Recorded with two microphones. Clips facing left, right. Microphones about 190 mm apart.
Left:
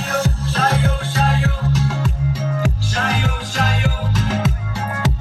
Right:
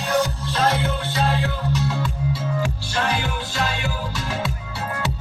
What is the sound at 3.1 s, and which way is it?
Music, 45° left (ahead or behind).